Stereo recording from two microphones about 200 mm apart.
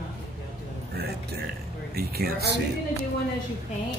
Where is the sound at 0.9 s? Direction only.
50° right (ahead or behind).